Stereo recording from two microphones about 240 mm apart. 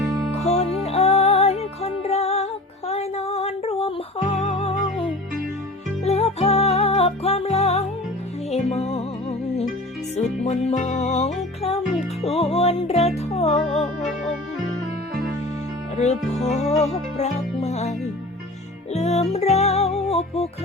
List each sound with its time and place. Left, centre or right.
0.0 s music: centre
0.4 s music: left
10.2 s music: left
16.5 s music: left
18.9 s music: left